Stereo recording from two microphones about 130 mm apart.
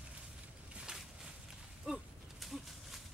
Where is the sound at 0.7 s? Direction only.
5° right (ahead or behind).